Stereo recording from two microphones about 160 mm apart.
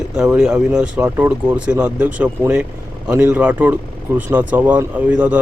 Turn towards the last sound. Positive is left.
turn(degrees=-10)  # may be behind; listen again after turning